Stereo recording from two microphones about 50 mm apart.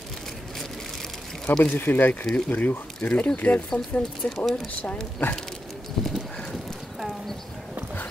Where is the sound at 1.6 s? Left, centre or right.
Left.